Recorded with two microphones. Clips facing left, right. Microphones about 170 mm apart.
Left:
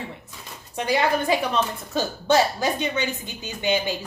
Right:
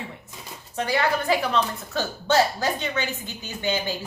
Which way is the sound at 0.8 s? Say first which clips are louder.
Left 2 dB; 15° left (ahead or behind).